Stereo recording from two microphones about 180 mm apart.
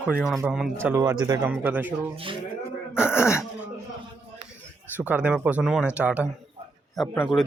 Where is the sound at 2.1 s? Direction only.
30° right (ahead or behind).